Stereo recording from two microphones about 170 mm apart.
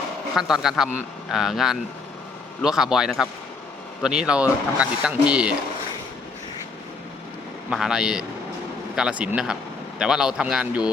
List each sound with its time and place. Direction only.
0.3 s speech: centre (ahead or behind)
7.7 s speech: 5° right (ahead or behind)